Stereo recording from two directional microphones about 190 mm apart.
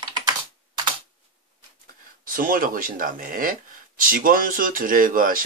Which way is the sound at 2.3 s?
45° right (ahead or behind).